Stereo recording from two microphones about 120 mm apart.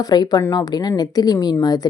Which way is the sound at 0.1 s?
35° left (ahead or behind).